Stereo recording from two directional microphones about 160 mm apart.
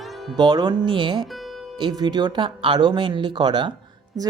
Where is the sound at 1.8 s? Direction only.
25° right (ahead or behind).